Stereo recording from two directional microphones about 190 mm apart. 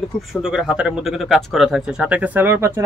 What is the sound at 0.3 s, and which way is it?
Speech, 5° right (ahead or behind).